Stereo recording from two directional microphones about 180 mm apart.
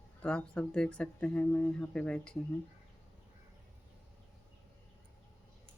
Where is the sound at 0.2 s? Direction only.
5° left (ahead or behind).